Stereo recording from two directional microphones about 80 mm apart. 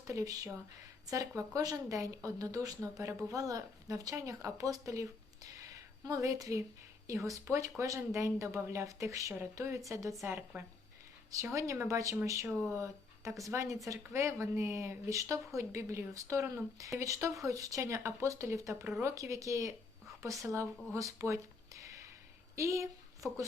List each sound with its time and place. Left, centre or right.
0.0 s speech: right
5.5 s a sound: right
7.1 s speech: right
11.4 s speech: right